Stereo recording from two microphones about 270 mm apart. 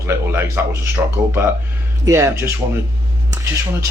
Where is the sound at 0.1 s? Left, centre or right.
Centre.